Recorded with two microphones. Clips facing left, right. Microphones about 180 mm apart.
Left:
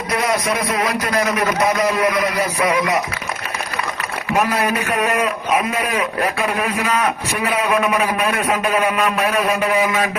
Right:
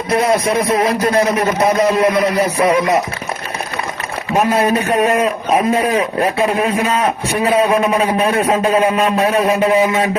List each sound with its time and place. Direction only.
0.1 s a man's voice: 25° right (ahead or behind)
4.3 s a man's voice: 25° right (ahead or behind)